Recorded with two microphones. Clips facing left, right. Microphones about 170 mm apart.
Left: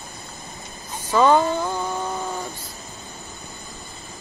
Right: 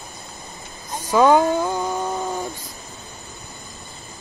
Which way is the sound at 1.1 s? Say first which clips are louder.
Right 2 dB; 15° right (ahead or behind).